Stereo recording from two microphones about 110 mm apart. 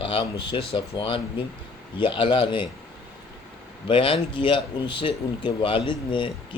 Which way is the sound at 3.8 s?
50° left (ahead or behind).